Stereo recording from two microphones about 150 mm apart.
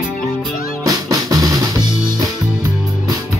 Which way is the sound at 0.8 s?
25° right (ahead or behind).